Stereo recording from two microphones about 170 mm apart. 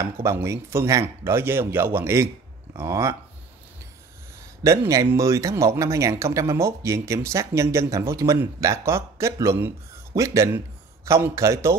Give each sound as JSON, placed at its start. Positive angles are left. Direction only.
{"t": 0.0, "sound": "speech", "side_deg": -15}
{"t": 4.6, "sound": "speech", "side_deg": -20}